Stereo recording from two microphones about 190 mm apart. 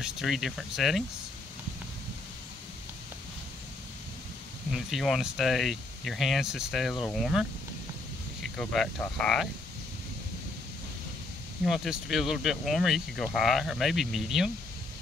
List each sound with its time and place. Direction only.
0.0 s speech: centre (ahead or behind)
4.7 s speech: centre (ahead or behind)
11.6 s speech: centre (ahead or behind)